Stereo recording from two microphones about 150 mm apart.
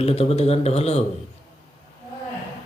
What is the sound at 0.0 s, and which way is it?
Speech, 40° left (ahead or behind).